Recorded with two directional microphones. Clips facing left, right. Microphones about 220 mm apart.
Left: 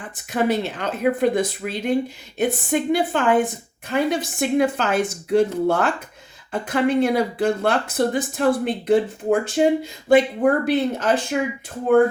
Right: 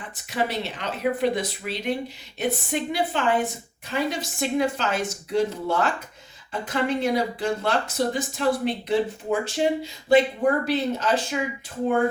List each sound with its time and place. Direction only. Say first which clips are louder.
0.3 s a woman's voice: left 6 dB; 50° left (ahead or behind)